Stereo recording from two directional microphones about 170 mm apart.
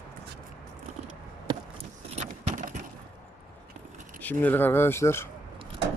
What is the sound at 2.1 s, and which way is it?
Keys jangling, 45° right (ahead or behind).